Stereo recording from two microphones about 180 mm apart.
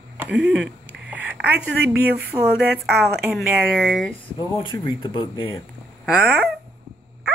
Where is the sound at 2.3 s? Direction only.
20° right (ahead or behind).